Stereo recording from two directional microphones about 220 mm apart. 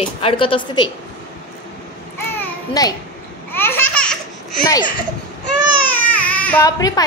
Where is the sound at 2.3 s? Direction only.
15° left (ahead or behind).